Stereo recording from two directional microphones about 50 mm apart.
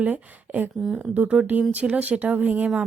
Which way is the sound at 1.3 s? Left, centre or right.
Right.